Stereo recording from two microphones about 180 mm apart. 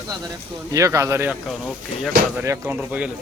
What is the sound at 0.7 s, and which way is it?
Speech, 15° right (ahead or behind).